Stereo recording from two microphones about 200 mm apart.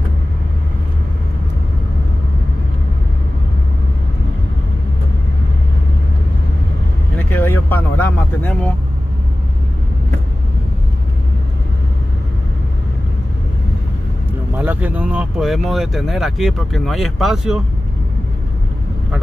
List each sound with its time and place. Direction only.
7.2 s vehicle: 10° left (ahead or behind)
14.5 s speech: 10° right (ahead or behind)